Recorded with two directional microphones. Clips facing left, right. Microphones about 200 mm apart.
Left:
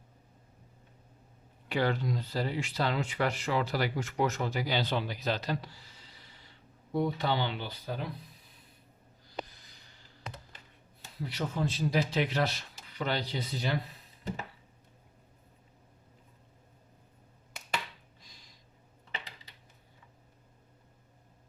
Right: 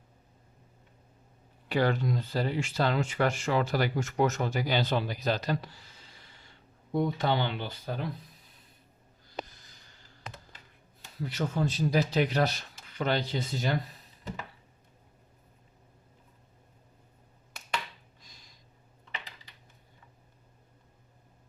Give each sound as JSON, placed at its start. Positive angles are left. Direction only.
{"t": 1.7, "sound": "speech", "side_deg": -45}
{"t": 11.3, "sound": "speech", "side_deg": -45}